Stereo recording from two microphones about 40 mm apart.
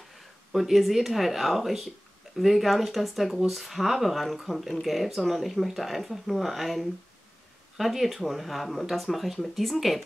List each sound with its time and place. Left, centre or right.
0.5 s speech: centre